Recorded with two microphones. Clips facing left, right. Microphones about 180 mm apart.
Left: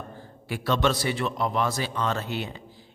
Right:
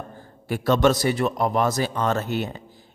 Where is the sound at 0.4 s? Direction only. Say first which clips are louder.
Right 6 dB; 45° right (ahead or behind).